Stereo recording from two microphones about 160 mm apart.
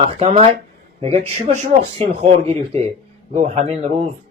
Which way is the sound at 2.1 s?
40° right (ahead or behind).